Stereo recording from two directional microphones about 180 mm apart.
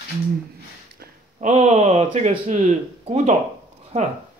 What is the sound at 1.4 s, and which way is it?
Speech, 40° right (ahead or behind).